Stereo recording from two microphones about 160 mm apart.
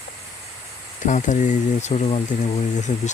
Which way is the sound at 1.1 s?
50° left (ahead or behind).